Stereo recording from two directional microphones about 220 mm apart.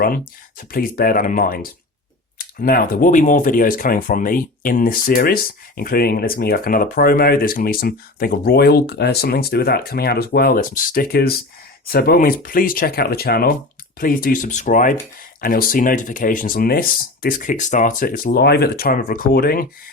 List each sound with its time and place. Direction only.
0.7 s speech: 40° left (ahead or behind)